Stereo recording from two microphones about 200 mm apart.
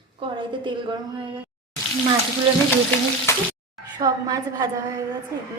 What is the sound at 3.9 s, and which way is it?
A woman's voice, 20° right (ahead or behind).